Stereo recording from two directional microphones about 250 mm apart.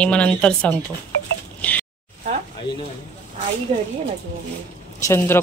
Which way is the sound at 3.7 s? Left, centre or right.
Right.